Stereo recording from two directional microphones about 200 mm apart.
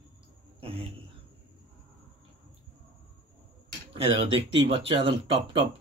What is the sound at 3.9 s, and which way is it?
Speech, 25° right (ahead or behind).